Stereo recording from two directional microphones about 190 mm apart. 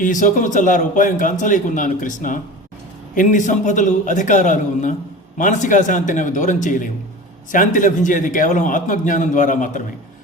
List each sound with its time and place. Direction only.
0.0 s a man's voice: 45° left (ahead or behind)